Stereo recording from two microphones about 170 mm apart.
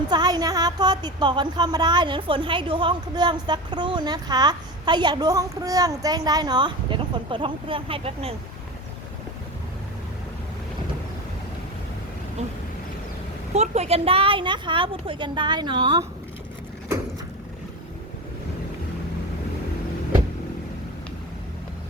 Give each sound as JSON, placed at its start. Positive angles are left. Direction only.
{"t": 0.1, "sound": "speech", "side_deg": -25}
{"t": 13.5, "sound": "speech", "side_deg": -40}